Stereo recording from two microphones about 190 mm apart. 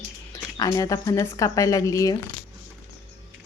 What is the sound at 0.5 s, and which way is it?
A woman's voice, 20° left (ahead or behind).